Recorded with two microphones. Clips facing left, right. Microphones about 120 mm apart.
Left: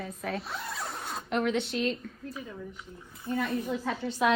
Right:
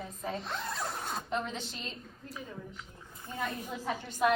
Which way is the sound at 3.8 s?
90° left.